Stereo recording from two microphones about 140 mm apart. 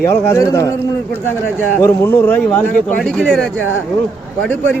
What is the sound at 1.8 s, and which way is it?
A man's voice, 15° left (ahead or behind).